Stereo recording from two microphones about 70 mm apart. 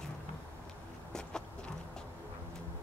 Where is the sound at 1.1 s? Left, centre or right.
Centre.